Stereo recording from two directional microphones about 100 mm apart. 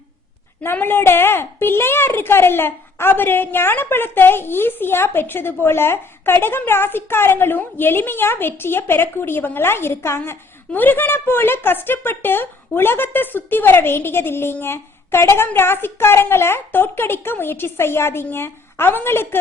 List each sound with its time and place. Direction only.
0.6 s a child's voice: 20° left (ahead or behind)